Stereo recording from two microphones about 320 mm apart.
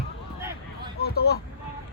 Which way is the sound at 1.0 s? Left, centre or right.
Left.